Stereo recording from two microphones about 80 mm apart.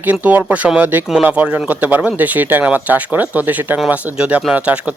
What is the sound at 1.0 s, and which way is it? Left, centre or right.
Speech, centre.